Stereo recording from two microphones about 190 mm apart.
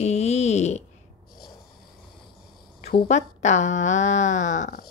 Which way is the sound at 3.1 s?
40° left (ahead or behind).